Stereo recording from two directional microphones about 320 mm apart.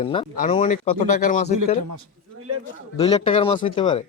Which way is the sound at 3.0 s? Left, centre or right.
Centre.